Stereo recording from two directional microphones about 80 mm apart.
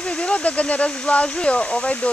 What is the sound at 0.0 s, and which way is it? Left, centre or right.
Speech, centre.